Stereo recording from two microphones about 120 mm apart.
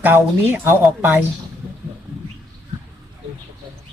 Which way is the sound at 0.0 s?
15° right (ahead or behind).